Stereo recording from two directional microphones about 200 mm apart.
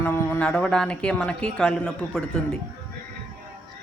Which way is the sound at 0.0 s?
10° left (ahead or behind).